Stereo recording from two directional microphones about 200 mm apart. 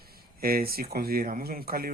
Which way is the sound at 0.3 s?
45° right (ahead or behind).